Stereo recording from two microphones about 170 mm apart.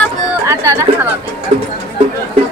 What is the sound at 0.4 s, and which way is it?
Chatter, 15° right (ahead or behind).